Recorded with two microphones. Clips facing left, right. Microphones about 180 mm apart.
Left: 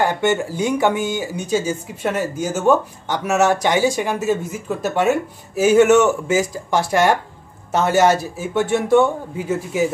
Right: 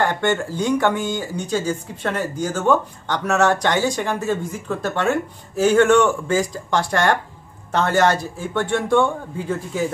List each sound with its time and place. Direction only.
0.0 s speech: 10° left (ahead or behind)